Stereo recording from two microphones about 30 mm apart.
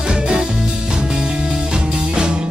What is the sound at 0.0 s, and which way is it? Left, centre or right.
Music, right.